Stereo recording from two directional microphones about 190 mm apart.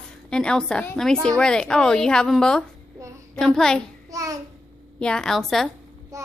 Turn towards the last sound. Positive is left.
turn(degrees=-15)  # may be behind; listen again after turning